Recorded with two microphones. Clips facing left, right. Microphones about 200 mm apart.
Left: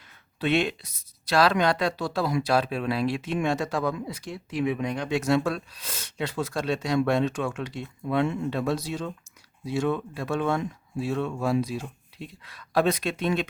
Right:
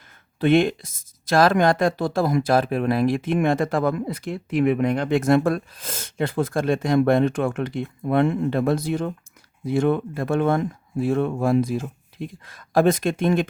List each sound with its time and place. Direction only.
0.3 s speech: 50° right (ahead or behind)